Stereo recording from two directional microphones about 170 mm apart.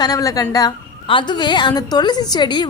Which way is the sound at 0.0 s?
20° left (ahead or behind).